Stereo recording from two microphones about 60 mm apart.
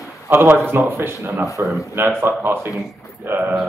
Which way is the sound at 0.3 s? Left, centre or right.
Right.